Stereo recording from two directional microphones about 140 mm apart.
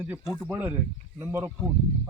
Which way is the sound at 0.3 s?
10° right (ahead or behind).